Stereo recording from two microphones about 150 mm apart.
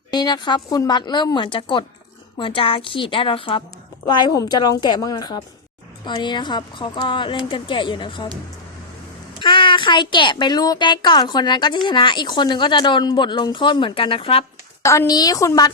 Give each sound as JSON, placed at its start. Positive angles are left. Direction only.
{"t": 0.1, "sound": "a woman's voice", "side_deg": 30}
{"t": 9.4, "sound": "a woman's voice", "side_deg": 35}
{"t": 14.8, "sound": "a woman's voice", "side_deg": 20}